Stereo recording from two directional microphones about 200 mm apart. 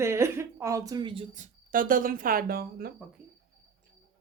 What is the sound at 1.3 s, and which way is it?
Speech, 40° right (ahead or behind).